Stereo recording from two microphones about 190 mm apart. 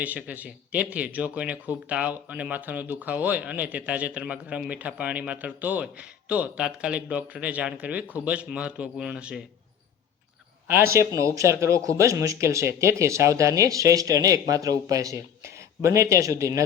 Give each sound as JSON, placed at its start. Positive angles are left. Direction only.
{"t": 0.0, "sound": "speech", "side_deg": -10}
{"t": 10.7, "sound": "speech", "side_deg": -15}